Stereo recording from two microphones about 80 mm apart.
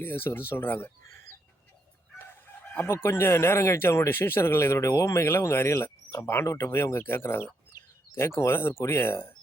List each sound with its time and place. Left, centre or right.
0.0 s speech: left
2.8 s speech: left